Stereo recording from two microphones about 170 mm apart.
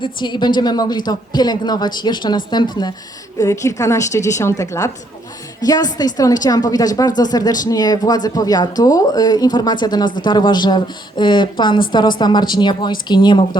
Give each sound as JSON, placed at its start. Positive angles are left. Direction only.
{"t": 0.0, "sound": "a woman's voice", "side_deg": 25}